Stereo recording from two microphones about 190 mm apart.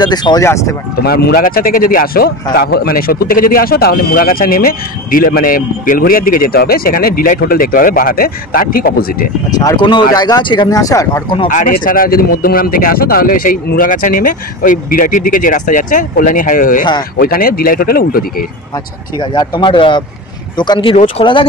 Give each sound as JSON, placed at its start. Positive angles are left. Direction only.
{"t": 0.0, "sound": "speech", "side_deg": 20}
{"t": 1.0, "sound": "speech", "side_deg": 55}
{"t": 9.6, "sound": "speech", "side_deg": 20}
{"t": 11.4, "sound": "speech", "side_deg": 45}
{"t": 19.1, "sound": "speech", "side_deg": 25}